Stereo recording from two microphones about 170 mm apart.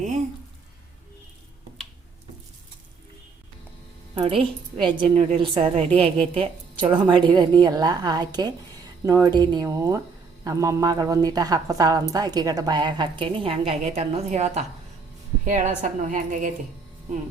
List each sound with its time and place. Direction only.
4.1 s a woman's voice: 35° right (ahead or behind)
5.0 s a woman's voice: 45° right (ahead or behind)
5.4 s a woman's voice: 30° right (ahead or behind); by 16.5 s 50° right (ahead or behind)